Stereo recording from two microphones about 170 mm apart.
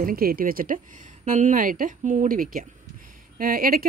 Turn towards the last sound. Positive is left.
turn(degrees=-60)  # may be behind; listen again after turning